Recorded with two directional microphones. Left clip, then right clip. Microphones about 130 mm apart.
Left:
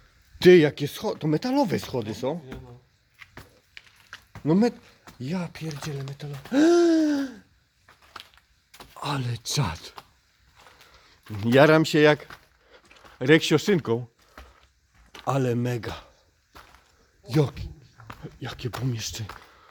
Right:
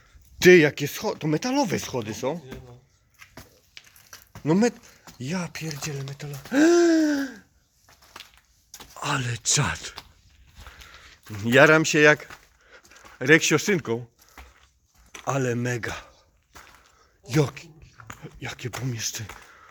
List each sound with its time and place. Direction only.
0.3 s speech: 10° left (ahead or behind)
4.3 s speech: 5° left (ahead or behind)
9.0 s speech: 10° left (ahead or behind)
11.4 s speech: 25° left (ahead or behind)
12.7 s a sound: 25° left (ahead or behind)
13.1 s speech: 20° left (ahead or behind); by 14.0 s 40° left (ahead or behind)
15.3 s speech: 25° left (ahead or behind)
16.0 s a sound: centre (ahead or behind)
17.2 s speech: 10° left (ahead or behind)
18.2 s speech: 35° left (ahead or behind)